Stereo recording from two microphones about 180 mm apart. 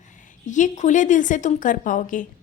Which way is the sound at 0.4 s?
45° left (ahead or behind).